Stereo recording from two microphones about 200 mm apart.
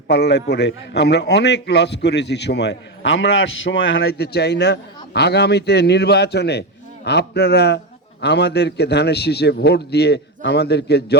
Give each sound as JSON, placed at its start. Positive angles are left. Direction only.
{"t": 0.1, "sound": "a man's voice", "side_deg": 60}